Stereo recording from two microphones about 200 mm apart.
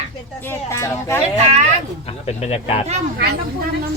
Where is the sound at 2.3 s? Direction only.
30° left (ahead or behind).